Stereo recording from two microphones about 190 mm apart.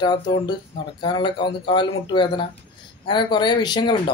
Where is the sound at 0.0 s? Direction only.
25° left (ahead or behind).